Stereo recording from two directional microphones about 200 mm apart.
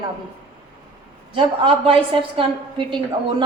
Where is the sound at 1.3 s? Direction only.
25° right (ahead or behind).